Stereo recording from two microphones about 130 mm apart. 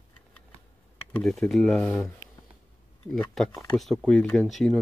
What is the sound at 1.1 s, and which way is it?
Speech, 5° left (ahead or behind).